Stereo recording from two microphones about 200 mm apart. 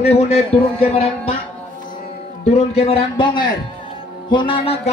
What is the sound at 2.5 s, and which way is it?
Speech, 30° left (ahead or behind).